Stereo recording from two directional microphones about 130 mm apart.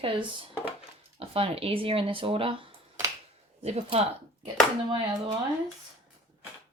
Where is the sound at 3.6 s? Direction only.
55° right (ahead or behind).